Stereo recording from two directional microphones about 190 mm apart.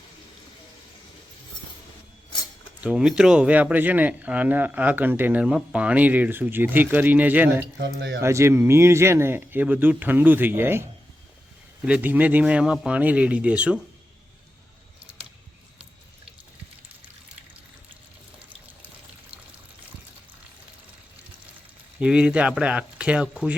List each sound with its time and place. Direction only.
2.8 s speech: 5° right (ahead or behind)
7.8 s speech: 65° right (ahead or behind)
8.2 s speech: 15° right (ahead or behind)
11.9 s speech: 10° right (ahead or behind)
21.9 s speech: 5° right (ahead or behind)